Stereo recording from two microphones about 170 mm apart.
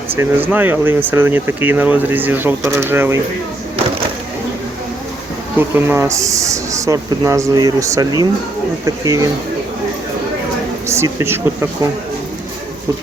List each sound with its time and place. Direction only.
0.2 s speech: 10° right (ahead or behind)
5.5 s speech: 15° right (ahead or behind)
10.8 s speech: 15° right (ahead or behind)